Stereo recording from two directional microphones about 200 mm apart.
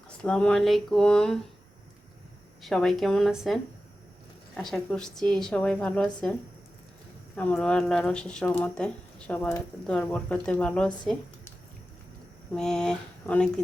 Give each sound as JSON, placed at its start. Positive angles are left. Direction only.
{"t": 0.2, "sound": "speech", "side_deg": 5}
{"t": 2.6, "sound": "speech", "side_deg": 0}
{"t": 7.3, "sound": "speech", "side_deg": 5}
{"t": 12.5, "sound": "speech", "side_deg": 5}